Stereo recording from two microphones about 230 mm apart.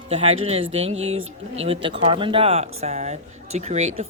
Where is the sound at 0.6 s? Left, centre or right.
Right.